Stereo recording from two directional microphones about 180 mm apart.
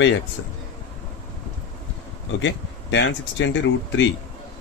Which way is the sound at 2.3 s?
90° left.